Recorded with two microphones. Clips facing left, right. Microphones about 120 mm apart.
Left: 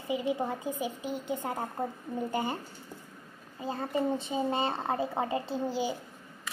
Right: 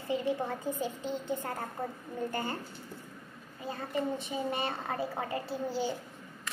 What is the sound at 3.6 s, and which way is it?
A child's voice, 30° left (ahead or behind).